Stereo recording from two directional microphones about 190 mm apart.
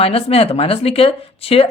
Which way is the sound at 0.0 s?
30° left (ahead or behind).